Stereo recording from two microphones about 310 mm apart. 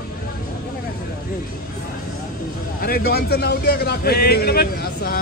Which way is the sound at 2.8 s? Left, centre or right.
Left.